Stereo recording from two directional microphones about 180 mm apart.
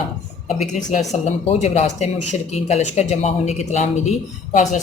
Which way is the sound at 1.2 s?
40° left (ahead or behind).